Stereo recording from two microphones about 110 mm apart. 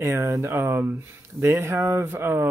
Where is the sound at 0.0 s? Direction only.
25° right (ahead or behind).